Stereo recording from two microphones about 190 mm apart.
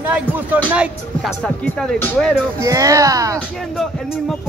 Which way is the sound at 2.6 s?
15° right (ahead or behind).